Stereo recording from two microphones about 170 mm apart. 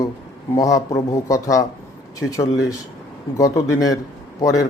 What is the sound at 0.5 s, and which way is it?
Speech, 20° left (ahead or behind).